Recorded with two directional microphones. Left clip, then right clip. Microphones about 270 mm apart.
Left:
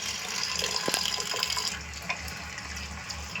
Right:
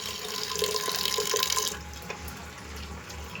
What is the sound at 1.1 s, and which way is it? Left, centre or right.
Water, right.